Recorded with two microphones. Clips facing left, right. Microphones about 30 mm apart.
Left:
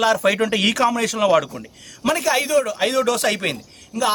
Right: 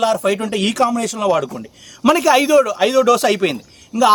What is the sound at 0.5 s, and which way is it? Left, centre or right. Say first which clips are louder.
Speech: right 1 dB; centre.